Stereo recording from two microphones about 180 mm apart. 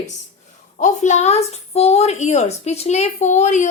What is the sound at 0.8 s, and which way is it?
A woman's voice, 40° left (ahead or behind).